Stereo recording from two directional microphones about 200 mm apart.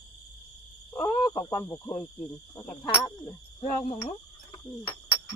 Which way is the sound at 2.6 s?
25° left (ahead or behind).